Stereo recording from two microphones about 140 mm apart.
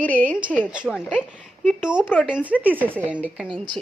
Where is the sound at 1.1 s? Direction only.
5° left (ahead or behind).